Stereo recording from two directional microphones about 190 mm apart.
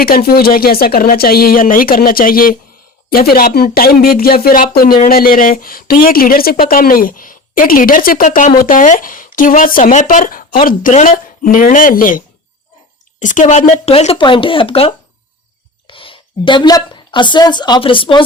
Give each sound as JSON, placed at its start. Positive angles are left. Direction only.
{"t": 0.0, "sound": "speech", "side_deg": 50}